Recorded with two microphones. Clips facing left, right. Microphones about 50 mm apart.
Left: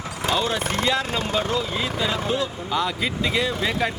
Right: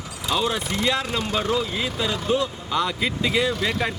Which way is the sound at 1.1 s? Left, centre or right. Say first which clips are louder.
Even; left.